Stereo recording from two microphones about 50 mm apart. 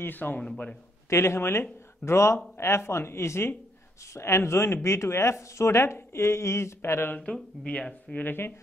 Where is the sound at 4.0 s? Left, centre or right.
Left.